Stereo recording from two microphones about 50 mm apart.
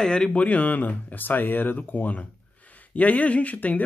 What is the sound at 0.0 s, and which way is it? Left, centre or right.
Speech, centre.